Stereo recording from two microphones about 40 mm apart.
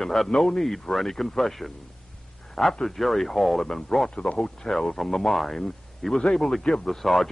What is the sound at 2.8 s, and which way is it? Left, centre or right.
Speech, centre.